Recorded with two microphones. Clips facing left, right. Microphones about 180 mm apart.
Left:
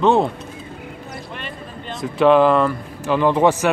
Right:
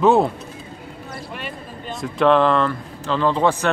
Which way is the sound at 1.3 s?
5° right (ahead or behind).